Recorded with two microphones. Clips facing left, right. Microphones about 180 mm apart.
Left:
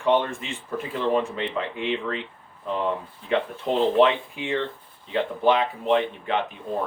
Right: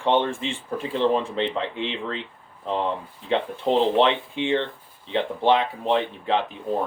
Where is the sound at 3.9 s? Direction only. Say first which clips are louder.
Left 1 dB; 30° right (ahead or behind).